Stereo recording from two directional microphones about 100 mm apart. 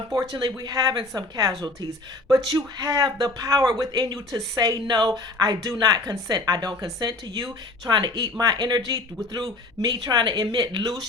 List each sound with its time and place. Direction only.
0.1 s speech: 40° right (ahead or behind)